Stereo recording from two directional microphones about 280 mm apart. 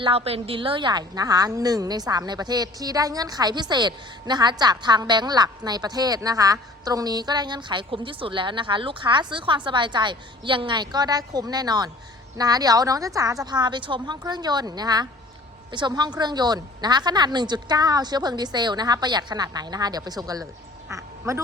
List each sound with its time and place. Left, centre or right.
0.0 s a woman's voice: right